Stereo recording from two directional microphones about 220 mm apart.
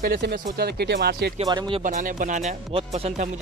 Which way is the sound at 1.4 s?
20° right (ahead or behind).